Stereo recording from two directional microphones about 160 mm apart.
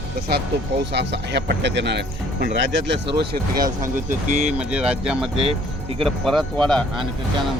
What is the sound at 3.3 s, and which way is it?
Speech, 60° right (ahead or behind).